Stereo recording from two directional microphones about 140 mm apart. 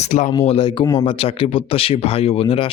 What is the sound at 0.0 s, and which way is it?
Speech, 60° left (ahead or behind).